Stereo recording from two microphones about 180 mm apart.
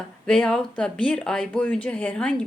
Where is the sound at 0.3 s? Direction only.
5° left (ahead or behind).